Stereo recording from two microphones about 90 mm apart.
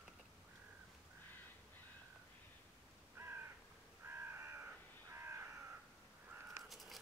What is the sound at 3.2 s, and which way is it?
Crow, 30° right (ahead or behind).